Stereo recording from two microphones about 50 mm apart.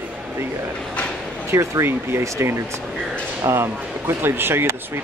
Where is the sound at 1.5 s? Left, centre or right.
Right.